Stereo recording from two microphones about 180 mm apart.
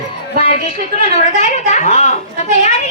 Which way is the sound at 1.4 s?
40° left (ahead or behind).